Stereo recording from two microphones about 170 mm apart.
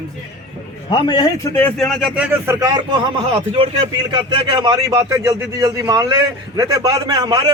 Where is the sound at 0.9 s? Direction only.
25° left (ahead or behind).